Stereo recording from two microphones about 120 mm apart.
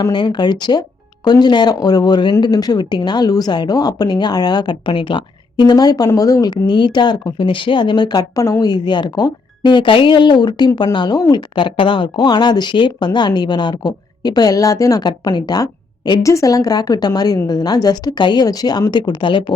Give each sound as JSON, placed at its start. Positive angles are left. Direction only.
{"t": 0.0, "sound": "speech", "side_deg": 40}